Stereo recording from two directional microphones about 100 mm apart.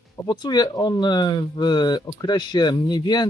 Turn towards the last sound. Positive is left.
turn(degrees=45)  # may be behind; listen again after turning